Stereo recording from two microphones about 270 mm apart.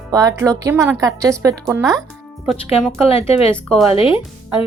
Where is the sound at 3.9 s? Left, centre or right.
Centre.